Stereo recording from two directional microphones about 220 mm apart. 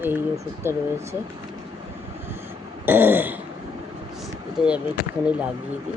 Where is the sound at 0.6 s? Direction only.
10° right (ahead or behind).